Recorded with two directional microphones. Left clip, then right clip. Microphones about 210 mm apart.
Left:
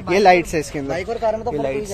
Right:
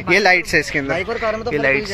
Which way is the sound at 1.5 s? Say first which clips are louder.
Right 6 dB; 10° left (ahead or behind).